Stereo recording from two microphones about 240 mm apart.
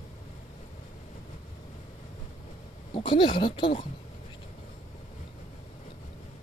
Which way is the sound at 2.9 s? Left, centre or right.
Centre.